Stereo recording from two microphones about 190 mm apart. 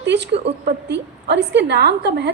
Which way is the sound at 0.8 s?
65° right (ahead or behind).